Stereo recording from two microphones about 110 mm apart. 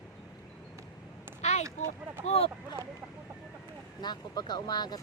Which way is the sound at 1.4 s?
90° left.